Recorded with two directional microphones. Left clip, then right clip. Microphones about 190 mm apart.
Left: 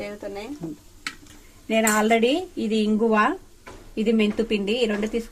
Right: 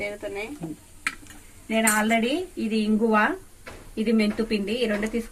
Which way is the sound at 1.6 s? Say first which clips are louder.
Left 2 dB; 55° left (ahead or behind).